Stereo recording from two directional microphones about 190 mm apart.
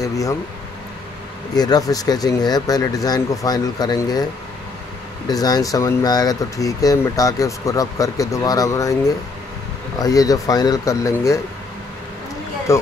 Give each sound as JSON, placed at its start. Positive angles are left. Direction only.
{"t": 0.0, "sound": "speech", "side_deg": 15}
{"t": 1.5, "sound": "speech", "side_deg": 20}
{"t": 5.3, "sound": "speech", "side_deg": 20}
{"t": 9.9, "sound": "speech", "side_deg": 20}